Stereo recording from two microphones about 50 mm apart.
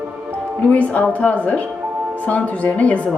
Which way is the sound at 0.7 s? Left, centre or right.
Left.